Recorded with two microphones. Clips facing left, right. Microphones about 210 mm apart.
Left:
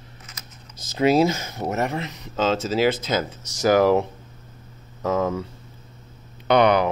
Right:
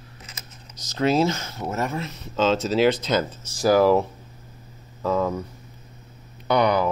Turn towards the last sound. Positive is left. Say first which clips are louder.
# left 3 dB
turn(degrees=70)  # may be behind; listen again after turning